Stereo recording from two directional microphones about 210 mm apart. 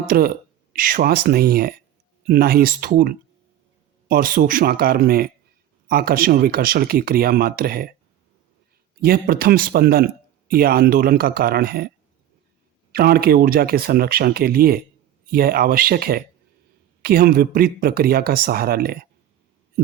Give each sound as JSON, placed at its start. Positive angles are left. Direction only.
{"t": 0.1, "sound": "speech", "side_deg": -45}
{"t": 9.0, "sound": "speech", "side_deg": -45}
{"t": 12.9, "sound": "speech", "side_deg": -45}